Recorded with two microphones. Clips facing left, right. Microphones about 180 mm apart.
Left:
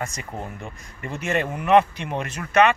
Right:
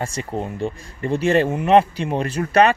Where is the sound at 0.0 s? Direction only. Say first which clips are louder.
Right 6 dB; 30° right (ahead or behind).